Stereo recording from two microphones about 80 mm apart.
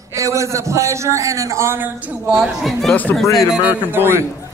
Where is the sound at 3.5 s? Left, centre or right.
Centre.